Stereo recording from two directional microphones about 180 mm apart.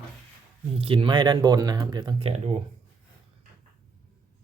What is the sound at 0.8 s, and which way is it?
Speech, 30° right (ahead or behind).